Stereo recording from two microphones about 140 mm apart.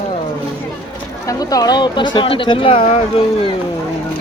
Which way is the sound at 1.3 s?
25° left (ahead or behind).